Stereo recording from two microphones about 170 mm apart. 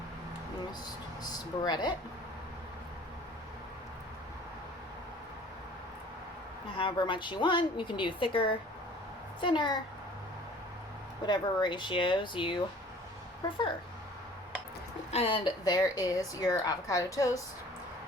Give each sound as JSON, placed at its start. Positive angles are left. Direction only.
{"t": 1.2, "sound": "a woman's voice", "side_deg": 25}
{"t": 6.7, "sound": "a woman's voice", "side_deg": 25}
{"t": 11.2, "sound": "a woman's voice", "side_deg": 25}
{"t": 15.1, "sound": "a woman's voice", "side_deg": 35}